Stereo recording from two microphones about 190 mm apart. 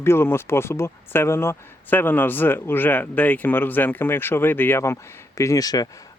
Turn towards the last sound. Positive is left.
turn(degrees=20)  # may be behind; listen again after turning